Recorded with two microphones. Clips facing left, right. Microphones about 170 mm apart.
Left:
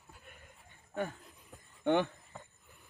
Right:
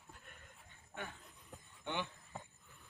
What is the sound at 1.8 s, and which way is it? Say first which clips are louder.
Speech: left 13 dB; 55° left (ahead or behind).